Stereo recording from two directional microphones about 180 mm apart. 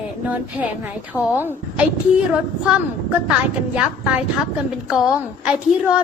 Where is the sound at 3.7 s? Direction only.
5° right (ahead or behind).